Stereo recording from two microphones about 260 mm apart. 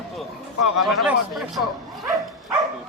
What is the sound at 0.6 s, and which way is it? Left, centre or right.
Speech, left.